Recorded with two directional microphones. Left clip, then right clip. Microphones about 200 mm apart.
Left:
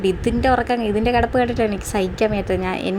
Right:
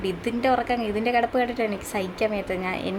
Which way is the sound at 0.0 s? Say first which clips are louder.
Left 6 dB; 30° left (ahead or behind).